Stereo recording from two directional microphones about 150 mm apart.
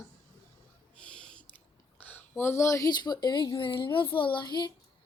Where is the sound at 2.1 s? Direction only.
15° left (ahead or behind).